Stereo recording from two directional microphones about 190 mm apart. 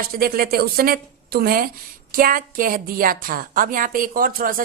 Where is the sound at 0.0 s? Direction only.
50° right (ahead or behind).